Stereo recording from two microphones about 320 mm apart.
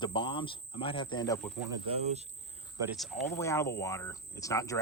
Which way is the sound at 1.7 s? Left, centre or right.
Centre.